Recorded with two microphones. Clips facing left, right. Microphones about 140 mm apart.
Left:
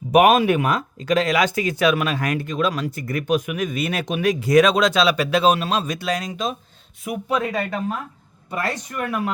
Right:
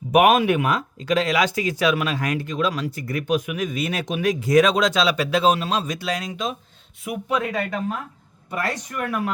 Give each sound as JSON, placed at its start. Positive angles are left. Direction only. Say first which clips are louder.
{"t": 0.1, "sound": "speech", "louder": "left 1 dB", "side_deg": 35}